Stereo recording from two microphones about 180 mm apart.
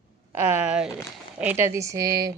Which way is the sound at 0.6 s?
5° right (ahead or behind).